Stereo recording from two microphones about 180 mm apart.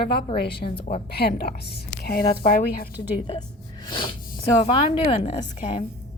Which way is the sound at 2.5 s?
55° left (ahead or behind).